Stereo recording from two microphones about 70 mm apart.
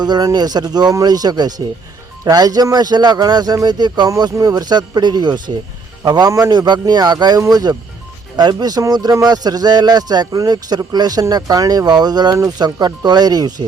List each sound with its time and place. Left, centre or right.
0.0 s speech: right
0.3 s speech: right
2.7 s speech: right
4.2 s speech: right
6.1 s speech: right
7.3 s speech: right